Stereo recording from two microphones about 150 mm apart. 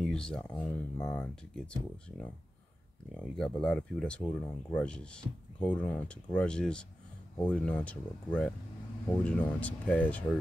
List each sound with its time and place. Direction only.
0.0 s speech: 5° left (ahead or behind)